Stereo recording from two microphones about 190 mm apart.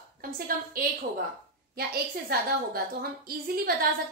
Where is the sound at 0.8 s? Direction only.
50° right (ahead or behind).